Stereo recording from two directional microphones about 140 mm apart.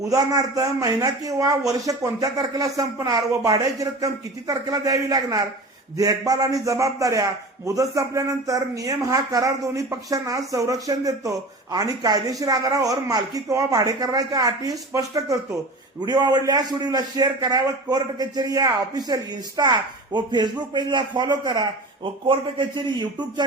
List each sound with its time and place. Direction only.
0.0 s a man's voice: 25° right (ahead or behind)